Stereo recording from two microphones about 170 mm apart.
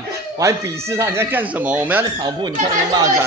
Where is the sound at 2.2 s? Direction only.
25° right (ahead or behind).